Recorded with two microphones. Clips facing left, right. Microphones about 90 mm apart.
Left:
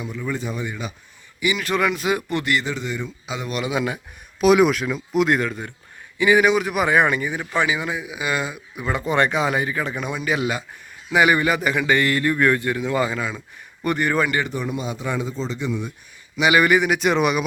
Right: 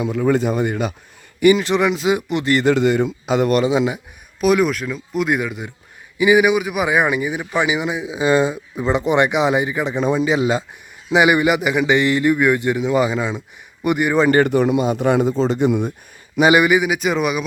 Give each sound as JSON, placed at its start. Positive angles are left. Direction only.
{"t": 0.0, "sound": "a man's voice", "side_deg": -80}
{"t": 1.5, "sound": "speech", "side_deg": -20}
{"t": 2.6, "sound": "a man's voice", "side_deg": -75}
{"t": 3.6, "sound": "speech", "side_deg": -25}
{"t": 4.4, "sound": "speech", "side_deg": 0}
{"t": 10.0, "sound": "speech", "side_deg": -30}
{"t": 14.3, "sound": "speech", "side_deg": -50}
{"t": 14.5, "sound": "a man's voice", "side_deg": -70}
{"t": 14.8, "sound": "a man's voice", "side_deg": -60}
{"t": 16.6, "sound": "speech", "side_deg": -5}